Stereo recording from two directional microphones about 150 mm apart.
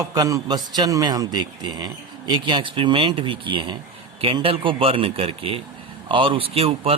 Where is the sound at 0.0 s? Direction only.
25° right (ahead or behind).